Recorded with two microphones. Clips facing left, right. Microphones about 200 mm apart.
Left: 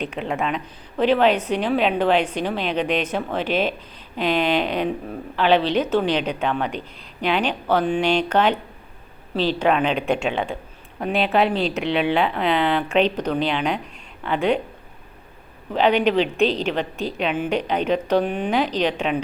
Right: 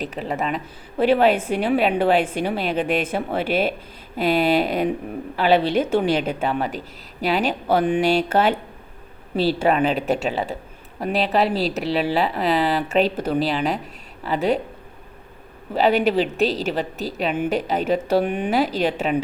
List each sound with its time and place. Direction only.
0.2 s a woman's voice: centre (ahead or behind)
15.7 s speech: 5° right (ahead or behind)
17.3 s a woman's voice: 55° right (ahead or behind)
17.6 s a woman's voice: 5° right (ahead or behind)